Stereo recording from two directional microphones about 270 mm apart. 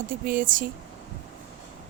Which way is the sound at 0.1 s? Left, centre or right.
Right.